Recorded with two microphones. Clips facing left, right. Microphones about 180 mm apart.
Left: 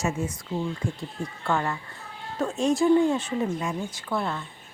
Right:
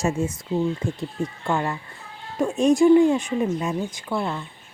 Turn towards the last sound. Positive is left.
turn(degrees=-15)  # may be behind; listen again after turning